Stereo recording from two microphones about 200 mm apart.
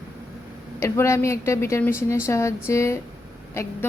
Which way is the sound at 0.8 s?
15° left (ahead or behind).